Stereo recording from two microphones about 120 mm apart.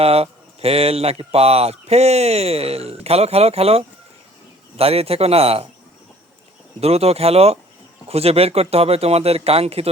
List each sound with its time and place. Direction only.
0.0 s speech: 55° right (ahead or behind)
6.7 s speech: 60° right (ahead or behind)